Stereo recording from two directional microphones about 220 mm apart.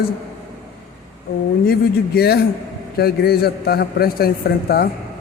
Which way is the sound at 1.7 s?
45° left (ahead or behind).